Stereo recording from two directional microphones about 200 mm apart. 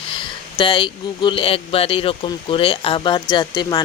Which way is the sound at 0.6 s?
25° left (ahead or behind).